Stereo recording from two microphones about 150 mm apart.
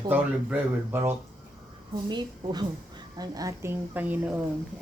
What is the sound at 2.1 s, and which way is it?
A woman's voice, 30° right (ahead or behind).